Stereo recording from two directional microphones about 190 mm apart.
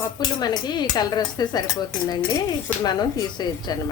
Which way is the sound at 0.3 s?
20° left (ahead or behind).